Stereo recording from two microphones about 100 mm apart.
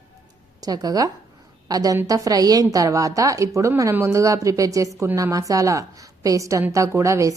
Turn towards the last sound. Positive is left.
turn(degrees=-30)  # may be behind; listen again after turning